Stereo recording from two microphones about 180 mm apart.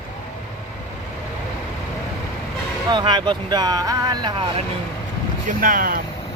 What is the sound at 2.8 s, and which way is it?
Speech, 25° right (ahead or behind).